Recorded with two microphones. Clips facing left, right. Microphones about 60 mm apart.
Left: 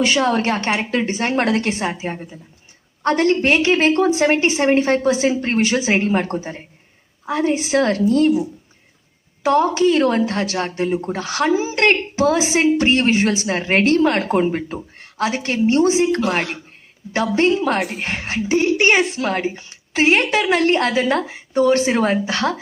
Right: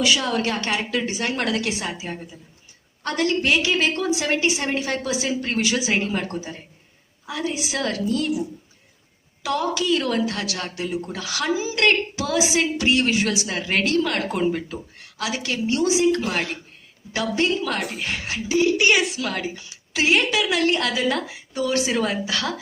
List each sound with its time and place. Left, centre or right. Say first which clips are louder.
0.0 s a woman's voice: left 4 dB; left
17.7 s a woman's voice: left 5 dB; left
18.0 s a woman's voice: left 4 dB; left